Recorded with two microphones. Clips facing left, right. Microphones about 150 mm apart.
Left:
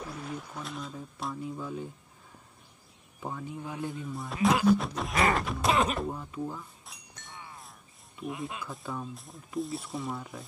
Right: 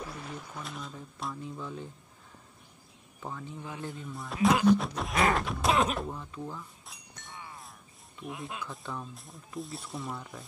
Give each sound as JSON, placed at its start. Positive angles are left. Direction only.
{"t": 0.0, "sound": "a sound", "side_deg": 0}
{"t": 3.2, "sound": "speech", "side_deg": 10}
{"t": 6.0, "sound": "speech", "side_deg": 10}
{"t": 6.9, "sound": "music", "side_deg": 0}
{"t": 8.2, "sound": "speech", "side_deg": 0}